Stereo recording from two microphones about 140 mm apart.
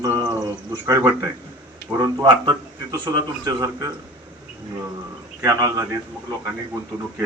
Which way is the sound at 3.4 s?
25° right (ahead or behind).